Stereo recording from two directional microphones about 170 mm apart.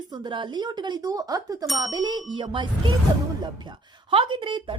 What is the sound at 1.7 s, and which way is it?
Speech, centre (ahead or behind).